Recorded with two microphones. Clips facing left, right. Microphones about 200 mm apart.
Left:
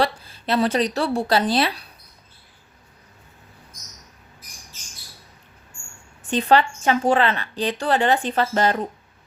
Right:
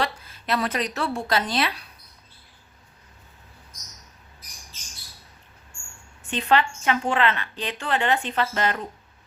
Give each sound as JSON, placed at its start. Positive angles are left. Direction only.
{"t": 0.0, "sound": "a woman's voice", "side_deg": 30}
{"t": 6.3, "sound": "a woman's voice", "side_deg": 35}